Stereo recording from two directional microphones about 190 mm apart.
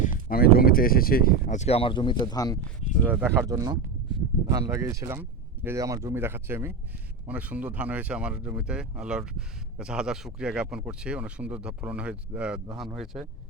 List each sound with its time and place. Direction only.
0.0 s speech: 45° left (ahead or behind); by 2.6 s 20° left (ahead or behind)
3.1 s speech: 10° right (ahead or behind)